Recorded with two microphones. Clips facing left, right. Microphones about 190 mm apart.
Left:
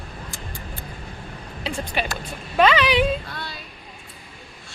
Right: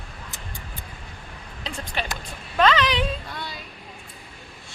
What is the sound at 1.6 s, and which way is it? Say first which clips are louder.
Speech: left 5 dB; 10° left (ahead or behind).